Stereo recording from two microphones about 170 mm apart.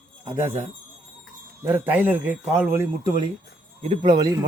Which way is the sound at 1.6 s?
10° right (ahead or behind).